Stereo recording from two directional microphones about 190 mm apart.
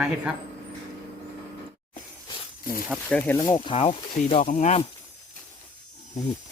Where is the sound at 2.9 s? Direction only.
10° left (ahead or behind); by 3.9 s 30° left (ahead or behind).